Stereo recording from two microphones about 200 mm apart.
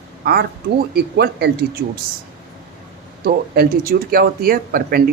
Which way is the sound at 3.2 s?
50° right (ahead or behind).